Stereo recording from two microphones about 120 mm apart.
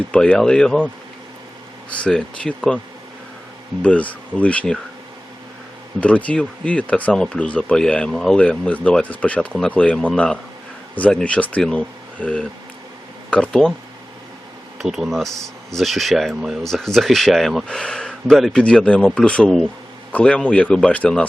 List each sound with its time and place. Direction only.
0.1 s speech: 10° left (ahead or behind)
1.9 s speech: 10° left (ahead or behind)
3.8 s speech: 10° left (ahead or behind)
6.0 s speech: 10° left (ahead or behind)
14.8 s speech: centre (ahead or behind)